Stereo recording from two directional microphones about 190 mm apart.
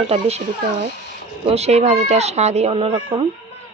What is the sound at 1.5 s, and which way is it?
A woman's voice, 35° right (ahead or behind).